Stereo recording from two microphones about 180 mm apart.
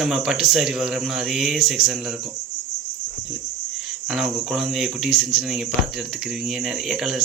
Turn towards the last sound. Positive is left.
turn(degrees=0)  # may be behind; listen again after turning